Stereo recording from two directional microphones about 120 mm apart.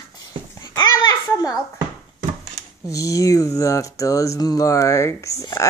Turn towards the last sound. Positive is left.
turn(degrees=25)  # may be behind; listen again after turning